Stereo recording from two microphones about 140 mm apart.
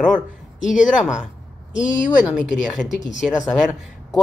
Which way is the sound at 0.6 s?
65° left (ahead or behind).